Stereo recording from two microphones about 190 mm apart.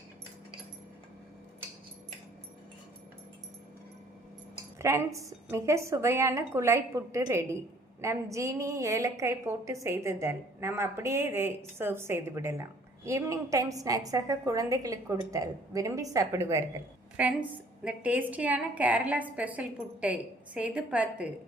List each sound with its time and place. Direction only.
4.8 s a woman's voice: 15° right (ahead or behind)